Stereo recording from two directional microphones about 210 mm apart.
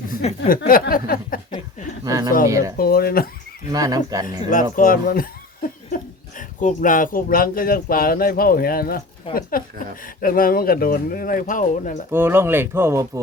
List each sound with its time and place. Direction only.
0.2 s speech: 35° left (ahead or behind)
2.0 s a sound: 15° right (ahead or behind)
2.5 s speech: 15° right (ahead or behind)
2.7 s speech: 45° left (ahead or behind)
3.7 s speech: 15° right (ahead or behind)
4.5 s speech: 40° left (ahead or behind)
6.6 s speech: 35° left (ahead or behind)
12.1 s speech: 10° right (ahead or behind)